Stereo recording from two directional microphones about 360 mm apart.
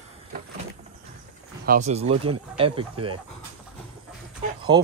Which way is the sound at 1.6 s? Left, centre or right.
Right.